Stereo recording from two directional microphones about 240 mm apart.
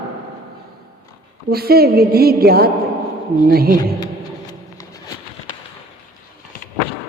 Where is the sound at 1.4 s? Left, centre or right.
Right.